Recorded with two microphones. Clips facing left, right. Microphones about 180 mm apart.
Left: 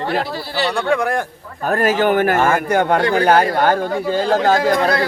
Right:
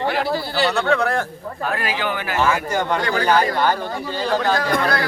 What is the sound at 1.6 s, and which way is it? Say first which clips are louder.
Speech: left 8 dB; 45° left (ahead or behind).